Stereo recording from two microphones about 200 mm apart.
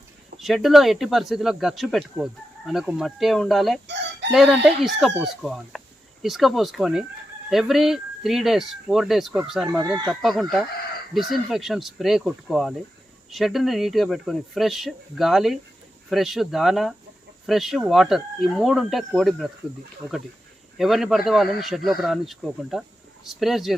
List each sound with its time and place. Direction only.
0.3 s speech: centre (ahead or behind)
3.8 s chicken: 60° right (ahead or behind)
4.3 s speech: centre (ahead or behind)
20.7 s speech: centre (ahead or behind)